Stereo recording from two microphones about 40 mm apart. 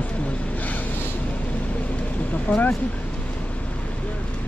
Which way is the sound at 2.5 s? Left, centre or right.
Left.